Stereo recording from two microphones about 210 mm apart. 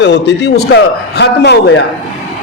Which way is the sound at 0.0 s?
55° left (ahead or behind).